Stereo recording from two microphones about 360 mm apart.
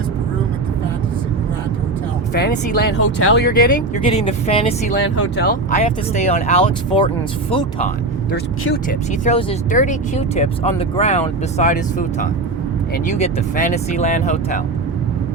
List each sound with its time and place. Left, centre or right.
2.3 s speech: left
5.0 s speech: left
8.3 s speech: left